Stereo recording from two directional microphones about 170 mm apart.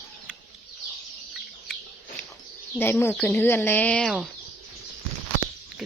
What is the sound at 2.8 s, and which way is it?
Speech, 15° left (ahead or behind).